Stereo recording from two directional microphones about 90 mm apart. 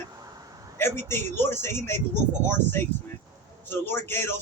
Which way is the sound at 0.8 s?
25° left (ahead or behind).